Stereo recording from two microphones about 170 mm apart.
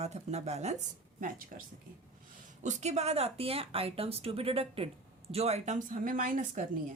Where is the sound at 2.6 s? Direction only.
45° right (ahead or behind).